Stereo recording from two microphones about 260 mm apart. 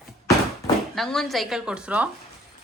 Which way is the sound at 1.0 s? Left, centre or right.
Centre.